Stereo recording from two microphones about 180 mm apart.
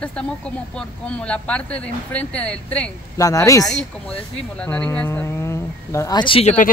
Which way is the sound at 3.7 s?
35° left (ahead or behind).